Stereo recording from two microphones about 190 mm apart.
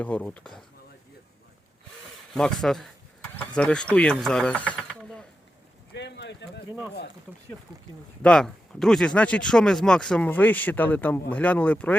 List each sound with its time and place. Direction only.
0.0 s speech: 5° left (ahead or behind)
2.3 s speech: centre (ahead or behind)
5.9 s a sound: 65° left (ahead or behind)
8.2 s speech: 5° left (ahead or behind)